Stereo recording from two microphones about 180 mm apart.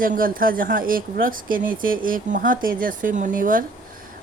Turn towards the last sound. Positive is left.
turn(degrees=-50)  # may be behind; listen again after turning